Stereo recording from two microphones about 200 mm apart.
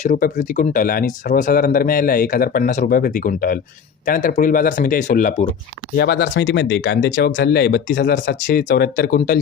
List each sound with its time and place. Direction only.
0.0 s speech: 40° left (ahead or behind)
6.0 s speech: 55° left (ahead or behind)
8.4 s speech: 45° left (ahead or behind)